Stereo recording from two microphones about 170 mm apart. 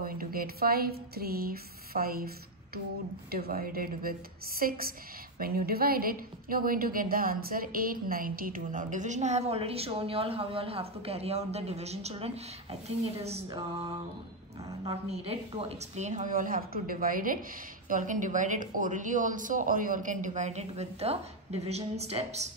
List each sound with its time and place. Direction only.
0.0 s a woman's voice: 55° right (ahead or behind); by 13.4 s 35° right (ahead or behind)
15.0 s a woman's voice: 35° right (ahead or behind)